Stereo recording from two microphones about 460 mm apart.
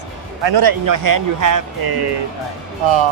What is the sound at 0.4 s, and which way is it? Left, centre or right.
Speech, right.